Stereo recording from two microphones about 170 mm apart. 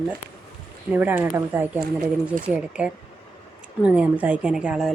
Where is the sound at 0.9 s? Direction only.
10° right (ahead or behind).